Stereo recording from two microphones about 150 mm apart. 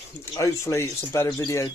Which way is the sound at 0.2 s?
20° left (ahead or behind).